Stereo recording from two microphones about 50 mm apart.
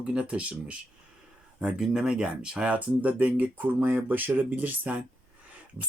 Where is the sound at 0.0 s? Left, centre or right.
Right.